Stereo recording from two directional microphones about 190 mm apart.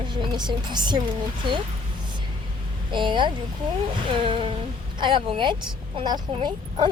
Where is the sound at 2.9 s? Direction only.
25° right (ahead or behind).